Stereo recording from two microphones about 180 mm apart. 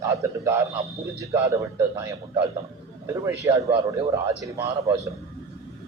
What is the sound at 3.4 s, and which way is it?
Speech, 20° right (ahead or behind).